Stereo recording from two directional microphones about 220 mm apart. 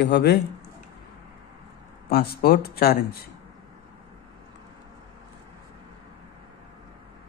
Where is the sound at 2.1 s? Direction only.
45° left (ahead or behind).